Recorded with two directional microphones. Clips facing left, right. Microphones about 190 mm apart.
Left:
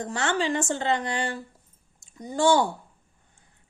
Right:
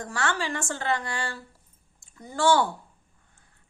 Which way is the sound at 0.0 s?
20° left (ahead or behind).